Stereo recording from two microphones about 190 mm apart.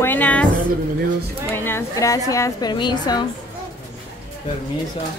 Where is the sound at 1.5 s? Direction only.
10° left (ahead or behind).